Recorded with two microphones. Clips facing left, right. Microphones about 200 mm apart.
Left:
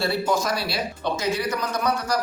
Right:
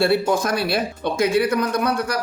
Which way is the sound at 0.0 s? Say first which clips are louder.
Right 5 dB; 55° right (ahead or behind).